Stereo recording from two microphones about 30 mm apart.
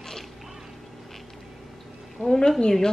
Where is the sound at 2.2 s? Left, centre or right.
Centre.